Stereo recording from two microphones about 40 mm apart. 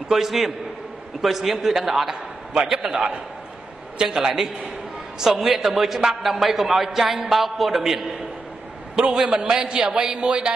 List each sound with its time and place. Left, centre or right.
0.1 s a man's voice: centre
8.9 s a man's voice: centre